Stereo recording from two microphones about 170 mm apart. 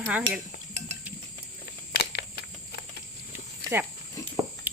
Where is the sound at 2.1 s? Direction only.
75° left (ahead or behind).